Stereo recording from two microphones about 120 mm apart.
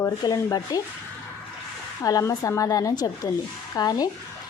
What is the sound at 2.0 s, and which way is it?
A woman's voice, 30° left (ahead or behind).